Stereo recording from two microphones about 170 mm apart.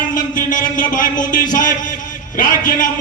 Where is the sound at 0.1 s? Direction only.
50° left (ahead or behind).